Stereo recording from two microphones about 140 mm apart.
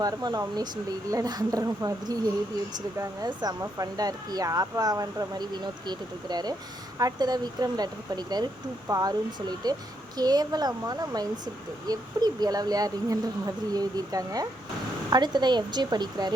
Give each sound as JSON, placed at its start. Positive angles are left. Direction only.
{"t": 0.0, "sound": "a woman's voice", "side_deg": -25}